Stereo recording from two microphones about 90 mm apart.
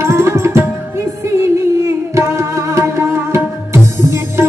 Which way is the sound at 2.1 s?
35° right (ahead or behind).